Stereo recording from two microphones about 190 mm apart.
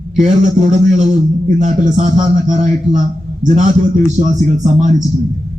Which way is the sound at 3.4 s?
40° right (ahead or behind).